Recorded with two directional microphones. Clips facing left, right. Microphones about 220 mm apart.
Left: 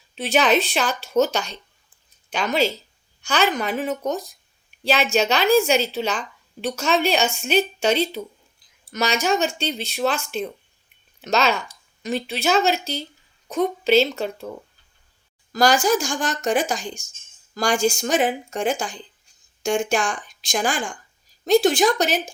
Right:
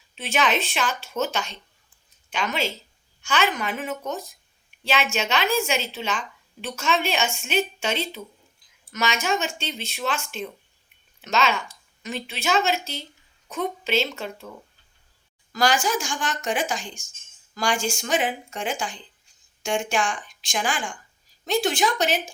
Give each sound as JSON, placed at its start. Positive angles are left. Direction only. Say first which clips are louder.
{"t": 0.2, "sound": "a woman's voice", "louder": "left 5 dB", "side_deg": 35}
{"t": 15.5, "sound": "a woman's voice", "louder": "left 5 dB", "side_deg": 40}